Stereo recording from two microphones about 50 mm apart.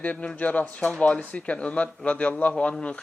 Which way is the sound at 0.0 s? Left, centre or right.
Left.